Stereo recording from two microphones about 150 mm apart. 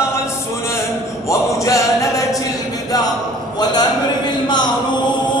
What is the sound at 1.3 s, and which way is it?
Music, 20° left (ahead or behind).